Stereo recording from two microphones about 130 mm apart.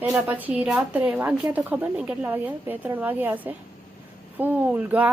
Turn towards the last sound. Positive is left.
turn(degrees=-10)  # may be behind; listen again after turning